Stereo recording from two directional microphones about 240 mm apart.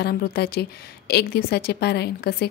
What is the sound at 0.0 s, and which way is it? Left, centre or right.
A woman's voice, left.